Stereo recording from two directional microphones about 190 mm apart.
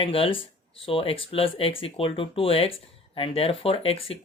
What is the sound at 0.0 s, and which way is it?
Speech, 30° left (ahead or behind).